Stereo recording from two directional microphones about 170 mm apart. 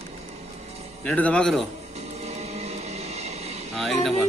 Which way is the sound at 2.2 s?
40° right (ahead or behind).